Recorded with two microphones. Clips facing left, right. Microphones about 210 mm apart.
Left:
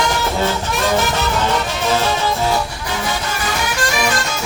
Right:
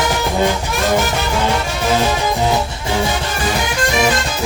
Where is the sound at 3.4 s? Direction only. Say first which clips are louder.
Right 3 dB; 30° right (ahead or behind).